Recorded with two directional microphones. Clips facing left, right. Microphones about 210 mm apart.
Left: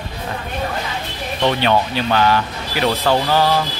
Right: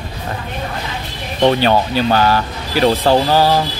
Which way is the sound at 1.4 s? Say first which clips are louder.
Right 4 dB; 40° right (ahead or behind).